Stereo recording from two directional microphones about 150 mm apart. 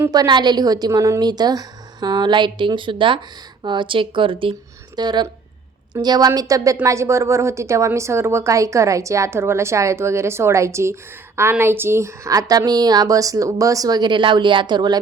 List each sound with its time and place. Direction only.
0.0 s a woman's voice: 25° right (ahead or behind)